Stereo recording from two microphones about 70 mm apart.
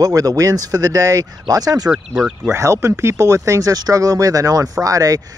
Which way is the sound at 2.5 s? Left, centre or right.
Right.